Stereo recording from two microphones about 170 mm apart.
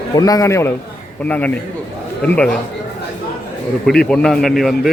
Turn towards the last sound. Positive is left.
turn(degrees=0)  # may be behind; listen again after turning